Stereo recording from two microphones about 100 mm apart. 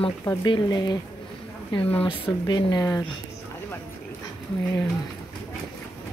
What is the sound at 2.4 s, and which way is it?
Speech, 45° left (ahead or behind).